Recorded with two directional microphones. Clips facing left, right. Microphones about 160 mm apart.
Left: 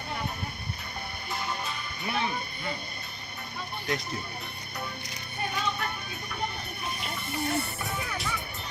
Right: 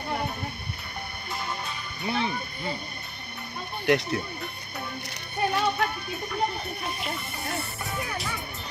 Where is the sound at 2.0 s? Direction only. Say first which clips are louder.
Right 3 dB; 30° right (ahead or behind).